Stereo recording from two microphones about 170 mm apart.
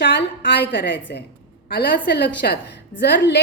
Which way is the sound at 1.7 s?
65° left (ahead or behind).